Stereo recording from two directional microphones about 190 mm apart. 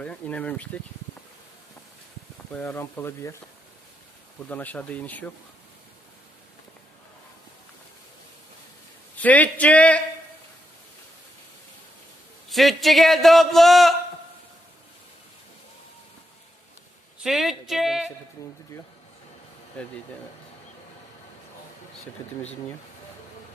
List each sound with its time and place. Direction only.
0.0 s speech: 5° left (ahead or behind)
2.5 s speech: 10° left (ahead or behind)
4.4 s speech: 10° left (ahead or behind)
9.1 s speech: 10° left (ahead or behind)
12.5 s a man's voice: centre (ahead or behind)
17.2 s music: centre (ahead or behind)
18.4 s speech: 20° left (ahead or behind)